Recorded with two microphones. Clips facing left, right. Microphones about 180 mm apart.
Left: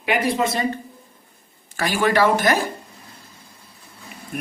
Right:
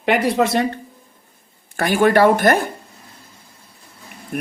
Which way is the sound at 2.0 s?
55° right (ahead or behind).